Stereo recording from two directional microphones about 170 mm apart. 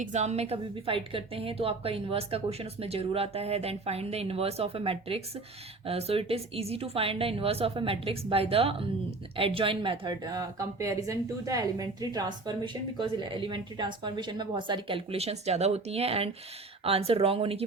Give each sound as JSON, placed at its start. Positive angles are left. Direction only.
{"t": 0.0, "sound": "a woman's voice", "side_deg": -45}